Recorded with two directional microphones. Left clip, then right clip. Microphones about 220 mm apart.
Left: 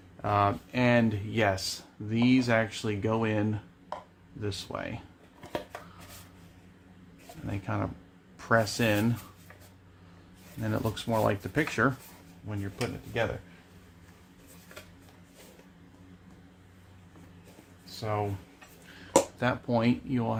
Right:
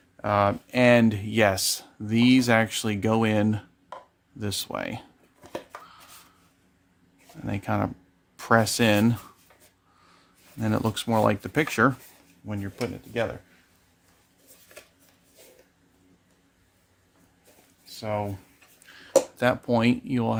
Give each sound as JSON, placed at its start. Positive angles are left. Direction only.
{"t": 0.2, "sound": "speech", "side_deg": -55}
{"t": 7.4, "sound": "speech", "side_deg": -55}
{"t": 10.6, "sound": "speech", "side_deg": -55}
{"t": 17.8, "sound": "a sound", "side_deg": -50}
{"t": 18.9, "sound": "speech", "side_deg": -50}